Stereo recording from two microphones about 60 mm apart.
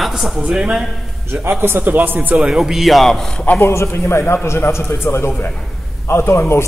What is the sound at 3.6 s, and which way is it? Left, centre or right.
A man's voice, left.